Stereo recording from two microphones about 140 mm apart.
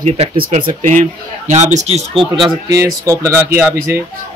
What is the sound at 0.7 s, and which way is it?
Speech, 60° right (ahead or behind).